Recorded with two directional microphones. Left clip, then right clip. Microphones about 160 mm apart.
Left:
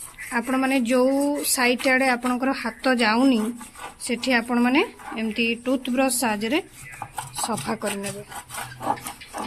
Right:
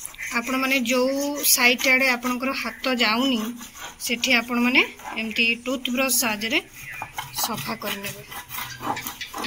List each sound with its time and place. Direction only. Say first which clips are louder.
0.3 s speech: even; 60° left (ahead or behind)